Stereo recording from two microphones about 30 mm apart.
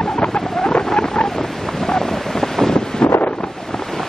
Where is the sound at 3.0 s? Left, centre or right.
Left.